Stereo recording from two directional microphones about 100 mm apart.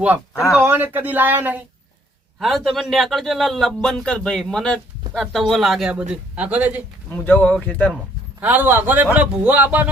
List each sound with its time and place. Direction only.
0.6 s speech: 20° right (ahead or behind)
2.4 s a man's voice: centre (ahead or behind); by 6.8 s 15° right (ahead or behind)
7.3 s speech: 15° left (ahead or behind)
8.4 s speech: 15° right (ahead or behind)